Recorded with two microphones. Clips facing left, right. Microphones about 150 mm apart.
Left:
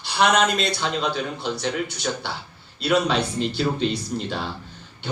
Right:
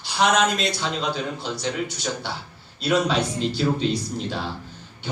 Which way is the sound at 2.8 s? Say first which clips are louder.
Even; 60° left (ahead or behind).